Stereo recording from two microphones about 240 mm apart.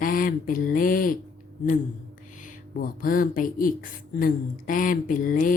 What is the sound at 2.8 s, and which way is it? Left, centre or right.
Speech, left.